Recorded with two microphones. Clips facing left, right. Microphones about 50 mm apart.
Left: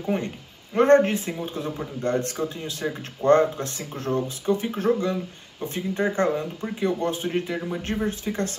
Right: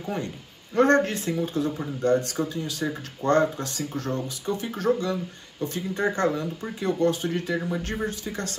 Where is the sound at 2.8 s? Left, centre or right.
Left.